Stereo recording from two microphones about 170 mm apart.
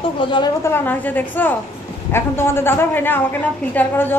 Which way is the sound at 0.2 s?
30° left (ahead or behind).